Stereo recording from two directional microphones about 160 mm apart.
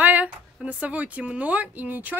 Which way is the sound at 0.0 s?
10° right (ahead or behind).